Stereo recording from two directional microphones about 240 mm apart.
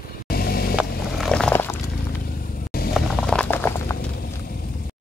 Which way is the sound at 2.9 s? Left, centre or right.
Centre.